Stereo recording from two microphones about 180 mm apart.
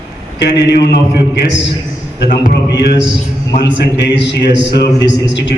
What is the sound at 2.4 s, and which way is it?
A man's voice, 65° left (ahead or behind).